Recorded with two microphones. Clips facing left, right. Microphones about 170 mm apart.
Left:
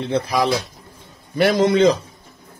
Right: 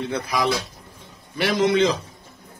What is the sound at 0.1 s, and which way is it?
Speech, 35° left (ahead or behind).